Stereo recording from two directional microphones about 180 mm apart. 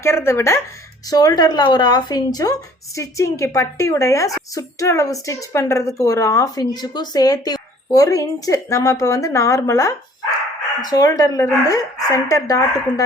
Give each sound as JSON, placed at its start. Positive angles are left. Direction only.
{"t": 0.0, "sound": "a woman's voice", "side_deg": 15}